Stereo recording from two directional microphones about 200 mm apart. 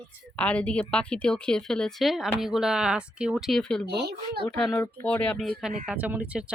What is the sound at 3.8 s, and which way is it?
Speech, 55° right (ahead or behind).